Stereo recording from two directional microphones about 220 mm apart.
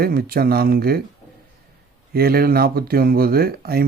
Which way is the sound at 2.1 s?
45° right (ahead or behind).